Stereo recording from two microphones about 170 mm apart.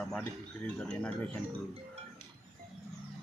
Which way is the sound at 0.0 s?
Centre (ahead or behind).